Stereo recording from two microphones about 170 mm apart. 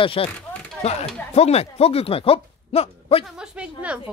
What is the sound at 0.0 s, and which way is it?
Speech, 30° left (ahead or behind).